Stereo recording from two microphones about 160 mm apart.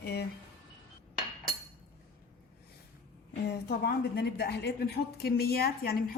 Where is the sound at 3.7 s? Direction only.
85° left.